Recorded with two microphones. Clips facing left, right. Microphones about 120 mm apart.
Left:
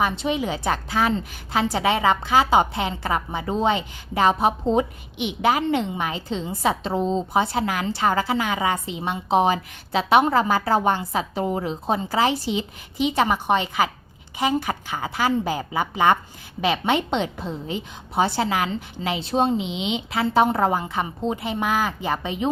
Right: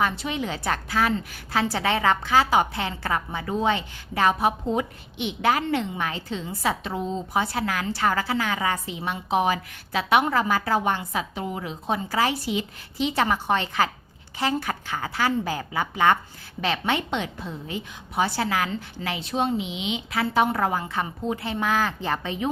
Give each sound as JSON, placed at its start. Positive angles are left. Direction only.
{"t": 0.0, "sound": "a woman's voice", "side_deg": 15}
{"t": 5.1, "sound": "a woman's voice", "side_deg": 15}
{"t": 19.2, "sound": "a woman's voice", "side_deg": 30}